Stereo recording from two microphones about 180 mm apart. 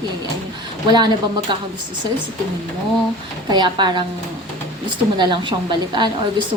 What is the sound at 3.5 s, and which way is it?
Speech, 25° right (ahead or behind).